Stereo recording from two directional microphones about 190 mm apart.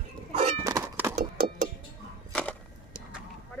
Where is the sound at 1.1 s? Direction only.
45° right (ahead or behind).